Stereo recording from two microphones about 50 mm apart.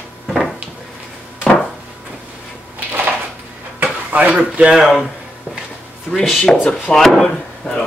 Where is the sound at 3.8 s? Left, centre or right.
Right.